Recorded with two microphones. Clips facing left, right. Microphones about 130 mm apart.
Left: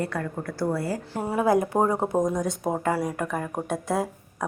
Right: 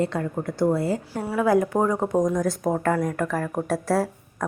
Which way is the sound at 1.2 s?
20° left (ahead or behind).